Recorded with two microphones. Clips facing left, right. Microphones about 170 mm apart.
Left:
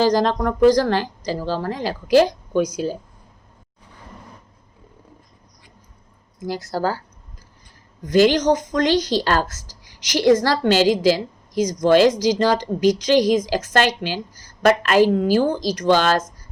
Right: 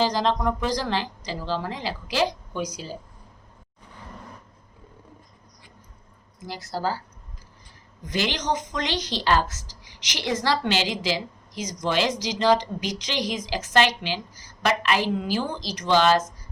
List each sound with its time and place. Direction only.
0.0 s a woman's voice: 45° left (ahead or behind)
6.7 s a woman's voice: 50° left (ahead or behind)
8.0 s a woman's voice: 45° left (ahead or behind)